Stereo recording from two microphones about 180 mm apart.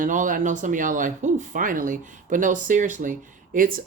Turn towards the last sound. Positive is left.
turn(degrees=-50)  # may be behind; listen again after turning